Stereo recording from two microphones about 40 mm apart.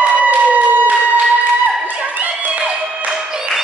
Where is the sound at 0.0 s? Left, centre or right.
Right.